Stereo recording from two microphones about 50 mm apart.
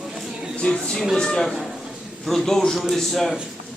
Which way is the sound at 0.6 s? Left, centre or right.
Centre.